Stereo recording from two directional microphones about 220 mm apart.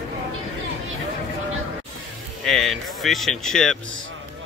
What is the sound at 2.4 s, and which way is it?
A man's voice, centre (ahead or behind).